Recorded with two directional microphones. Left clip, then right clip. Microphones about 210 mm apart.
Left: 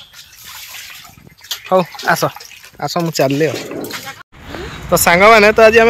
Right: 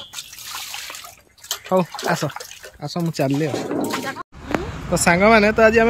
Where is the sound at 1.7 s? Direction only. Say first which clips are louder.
Left 7 dB; 10° right (ahead or behind).